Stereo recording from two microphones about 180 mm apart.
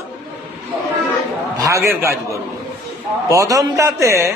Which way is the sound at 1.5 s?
15° right (ahead or behind).